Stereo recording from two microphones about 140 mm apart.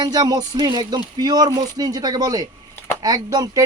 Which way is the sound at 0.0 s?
30° right (ahead or behind).